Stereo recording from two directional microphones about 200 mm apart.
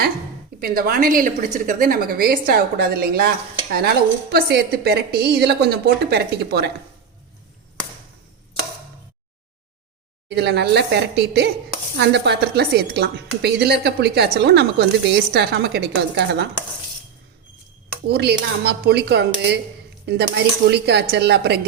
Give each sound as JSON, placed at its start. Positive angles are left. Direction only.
{"t": 0.6, "sound": "a woman's voice", "side_deg": -45}
{"t": 10.2, "sound": "a woman's voice", "side_deg": -55}
{"t": 18.1, "sound": "a woman's voice", "side_deg": -55}